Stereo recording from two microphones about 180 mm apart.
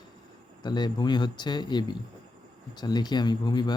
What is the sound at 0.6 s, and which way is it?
Speech, 25° left (ahead or behind).